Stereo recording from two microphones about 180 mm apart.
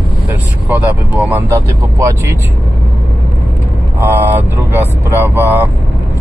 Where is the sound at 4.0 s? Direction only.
10° right (ahead or behind).